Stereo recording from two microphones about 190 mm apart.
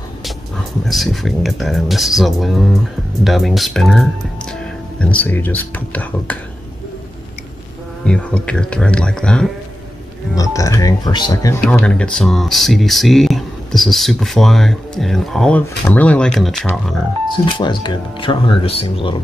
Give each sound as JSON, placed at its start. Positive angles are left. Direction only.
{"t": 0.8, "sound": "speech", "side_deg": 0}
{"t": 8.0, "sound": "speech", "side_deg": 5}
{"t": 10.3, "sound": "speech", "side_deg": 15}
{"t": 11.6, "sound": "speech", "side_deg": 5}
{"t": 17.5, "sound": "speech", "side_deg": 25}